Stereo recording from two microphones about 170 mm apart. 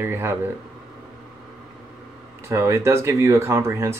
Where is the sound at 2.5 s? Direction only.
15° right (ahead or behind).